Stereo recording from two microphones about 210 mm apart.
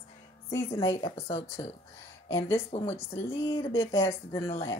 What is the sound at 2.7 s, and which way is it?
Speech, 30° left (ahead or behind).